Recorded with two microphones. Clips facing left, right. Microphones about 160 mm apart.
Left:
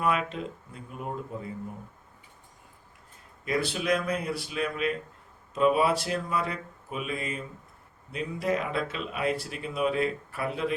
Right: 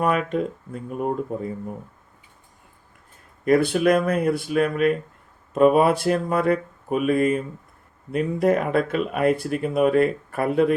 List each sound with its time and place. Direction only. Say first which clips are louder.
0.0 s speech: right 6 dB; 50° right (ahead or behind)
3.4 s speech: right 11 dB; 55° right (ahead or behind)